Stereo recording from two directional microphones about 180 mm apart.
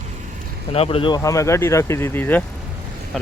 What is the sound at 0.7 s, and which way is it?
Speech, 30° left (ahead or behind).